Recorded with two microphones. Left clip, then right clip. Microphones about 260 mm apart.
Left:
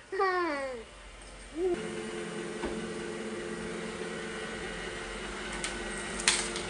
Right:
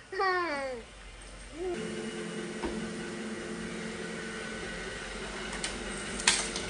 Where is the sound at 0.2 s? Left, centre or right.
Left.